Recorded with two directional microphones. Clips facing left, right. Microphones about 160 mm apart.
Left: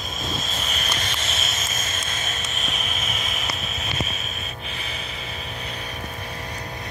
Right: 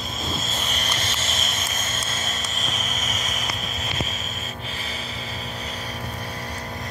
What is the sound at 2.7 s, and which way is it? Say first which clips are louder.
Vehicle: even; 40° right (ahead or behind).